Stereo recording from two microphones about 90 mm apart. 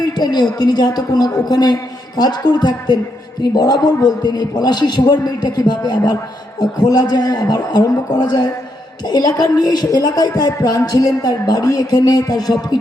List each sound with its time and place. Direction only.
0.0 s a woman's voice: 50° left (ahead or behind)